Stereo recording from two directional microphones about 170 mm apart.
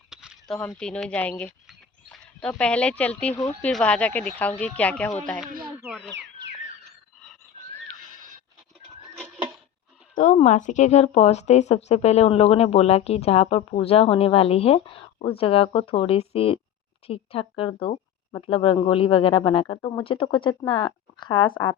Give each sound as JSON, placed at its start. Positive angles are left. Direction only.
{"t": 0.1, "sound": "speech", "side_deg": -5}
{"t": 1.6, "sound": "a sound", "side_deg": 5}
{"t": 3.6, "sound": "speech", "side_deg": 5}
{"t": 10.3, "sound": "speech", "side_deg": 45}